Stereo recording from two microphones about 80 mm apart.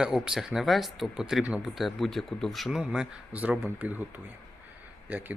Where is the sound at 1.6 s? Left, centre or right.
Centre.